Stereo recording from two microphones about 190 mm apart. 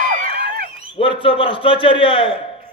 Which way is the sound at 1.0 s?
30° left (ahead or behind).